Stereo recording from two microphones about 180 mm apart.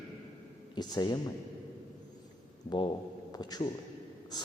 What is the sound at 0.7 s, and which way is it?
Speech, 25° left (ahead or behind).